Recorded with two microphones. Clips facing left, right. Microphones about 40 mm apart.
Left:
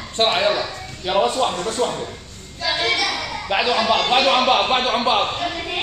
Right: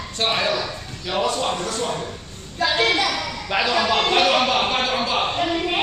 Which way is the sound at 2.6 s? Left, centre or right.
Right.